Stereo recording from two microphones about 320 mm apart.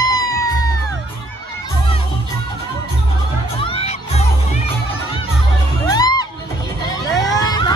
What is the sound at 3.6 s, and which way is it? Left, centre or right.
Music, centre.